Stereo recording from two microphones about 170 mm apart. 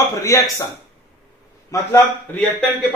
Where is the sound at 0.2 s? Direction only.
15° left (ahead or behind).